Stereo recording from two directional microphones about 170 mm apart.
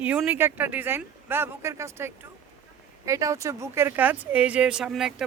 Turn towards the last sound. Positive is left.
turn(degrees=-5)  # may be behind; listen again after turning